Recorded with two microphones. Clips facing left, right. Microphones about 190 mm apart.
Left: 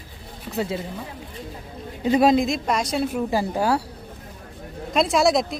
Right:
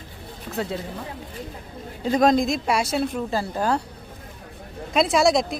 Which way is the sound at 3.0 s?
10° left (ahead or behind).